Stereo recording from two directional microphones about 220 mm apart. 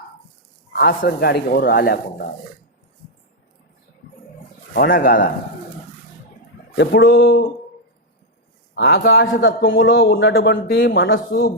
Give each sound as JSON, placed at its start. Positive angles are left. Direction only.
{"t": 0.7, "sound": "a man's voice", "side_deg": 45}
{"t": 4.7, "sound": "speech", "side_deg": 40}
{"t": 6.7, "sound": "a man's voice", "side_deg": 45}
{"t": 8.7, "sound": "a man's voice", "side_deg": 45}
{"t": 9.2, "sound": "speech", "side_deg": 60}
{"t": 9.6, "sound": "a man's voice", "side_deg": 50}